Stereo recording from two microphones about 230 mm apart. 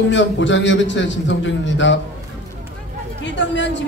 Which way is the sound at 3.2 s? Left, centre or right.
Left.